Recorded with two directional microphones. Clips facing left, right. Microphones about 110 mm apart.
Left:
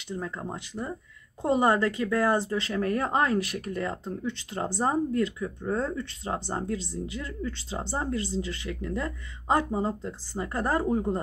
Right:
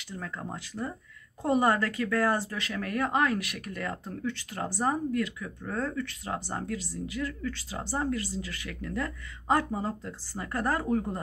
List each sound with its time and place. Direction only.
0.0 s speech: 25° left (ahead or behind)